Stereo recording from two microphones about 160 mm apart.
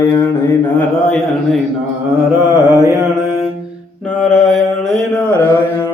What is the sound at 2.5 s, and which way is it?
Mantra, 20° right (ahead or behind).